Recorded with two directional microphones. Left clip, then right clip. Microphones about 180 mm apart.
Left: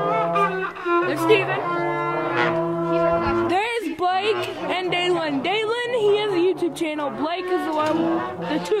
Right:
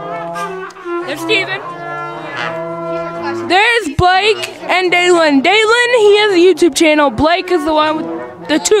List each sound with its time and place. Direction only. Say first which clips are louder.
3.4 s speech: right 11 dB; 40° right (ahead or behind)